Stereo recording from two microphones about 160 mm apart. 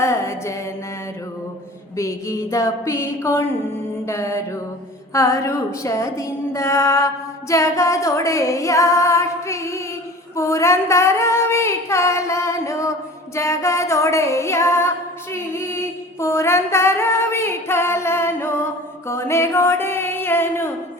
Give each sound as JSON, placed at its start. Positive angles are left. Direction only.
{"t": 0.0, "sound": "music", "side_deg": 15}
{"t": 2.0, "sound": "a woman's voice", "side_deg": 20}
{"t": 4.0, "sound": "music", "side_deg": 20}
{"t": 5.1, "sound": "a woman's voice", "side_deg": 20}
{"t": 10.3, "sound": "child singing", "side_deg": 20}
{"t": 13.3, "sound": "music", "side_deg": 20}